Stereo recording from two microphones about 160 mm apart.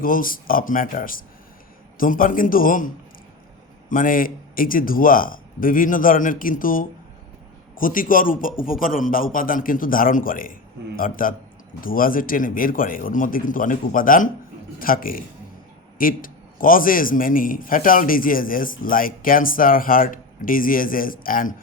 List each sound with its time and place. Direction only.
0.0 s a man's voice: 60° left (ahead or behind)